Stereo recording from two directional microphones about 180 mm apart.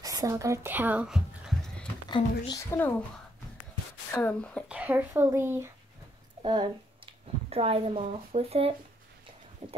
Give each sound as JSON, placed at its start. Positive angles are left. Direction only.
{"t": 0.0, "sound": "a sound", "side_deg": -20}
{"t": 2.0, "sound": "speech", "side_deg": 25}
{"t": 4.1, "sound": "speech", "side_deg": 10}
{"t": 4.6, "sound": "speech", "side_deg": -10}
{"t": 6.4, "sound": "speech", "side_deg": -25}
{"t": 9.6, "sound": "horse", "side_deg": -35}